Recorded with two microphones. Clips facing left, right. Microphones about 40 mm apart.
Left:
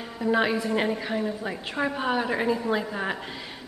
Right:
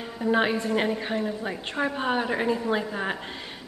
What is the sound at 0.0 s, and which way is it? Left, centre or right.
A woman's voice, centre.